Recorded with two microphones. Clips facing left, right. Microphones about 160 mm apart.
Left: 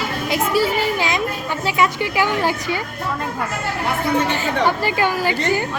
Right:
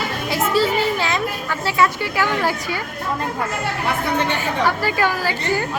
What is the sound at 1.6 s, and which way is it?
Speech, 15° left (ahead or behind).